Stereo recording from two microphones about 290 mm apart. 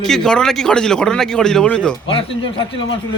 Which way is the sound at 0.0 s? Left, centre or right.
Centre.